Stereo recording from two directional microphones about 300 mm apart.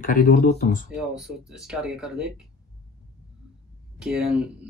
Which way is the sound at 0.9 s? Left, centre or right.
Centre.